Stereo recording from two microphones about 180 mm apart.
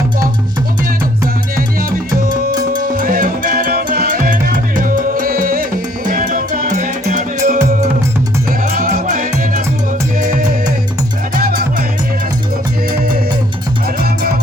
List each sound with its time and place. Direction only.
2.9 s music: 50° right (ahead or behind)
12.9 s music: 55° right (ahead or behind)